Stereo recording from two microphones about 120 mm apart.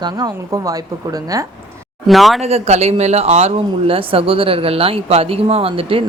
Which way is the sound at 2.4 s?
60° right (ahead or behind).